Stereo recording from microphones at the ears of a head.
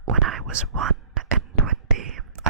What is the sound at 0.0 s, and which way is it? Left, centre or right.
Whispering, right.